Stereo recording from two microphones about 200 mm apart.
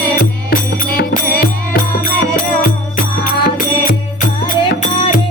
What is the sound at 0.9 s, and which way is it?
Music, 45° left (ahead or behind).